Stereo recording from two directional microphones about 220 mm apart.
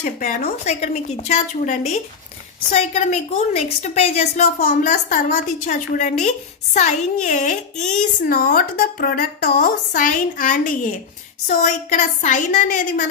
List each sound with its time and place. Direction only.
0.0 s speech: 35° left (ahead or behind)